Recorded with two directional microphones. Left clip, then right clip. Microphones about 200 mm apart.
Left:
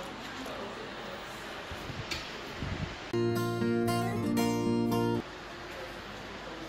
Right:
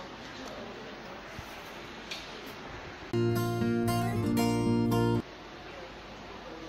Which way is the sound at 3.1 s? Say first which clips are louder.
Even; centre (ahead or behind).